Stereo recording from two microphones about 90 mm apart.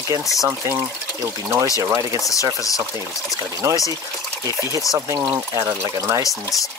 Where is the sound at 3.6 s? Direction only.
35° right (ahead or behind).